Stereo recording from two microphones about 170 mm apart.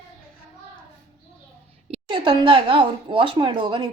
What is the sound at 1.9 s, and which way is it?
A woman's voice, 30° right (ahead or behind).